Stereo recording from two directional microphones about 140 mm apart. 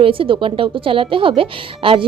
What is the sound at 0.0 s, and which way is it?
A woman's voice, 40° right (ahead or behind).